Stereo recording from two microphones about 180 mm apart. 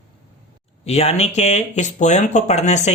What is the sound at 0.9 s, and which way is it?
Speech, 35° left (ahead or behind).